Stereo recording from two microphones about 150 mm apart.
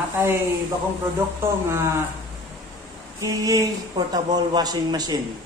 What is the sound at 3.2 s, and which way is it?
A man's voice, 25° right (ahead or behind).